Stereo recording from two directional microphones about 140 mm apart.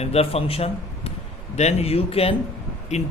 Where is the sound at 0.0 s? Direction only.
45° left (ahead or behind).